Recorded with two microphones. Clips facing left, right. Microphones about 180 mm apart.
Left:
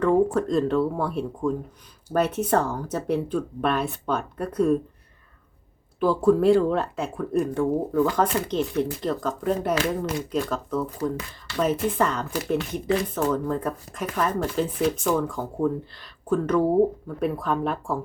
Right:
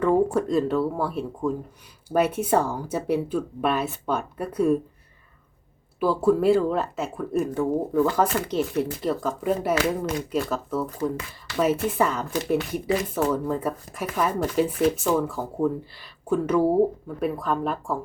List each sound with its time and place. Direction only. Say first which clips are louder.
0.0 s speech: even; 10° right (ahead or behind)
6.0 s speech: left 1 dB; 5° right (ahead or behind)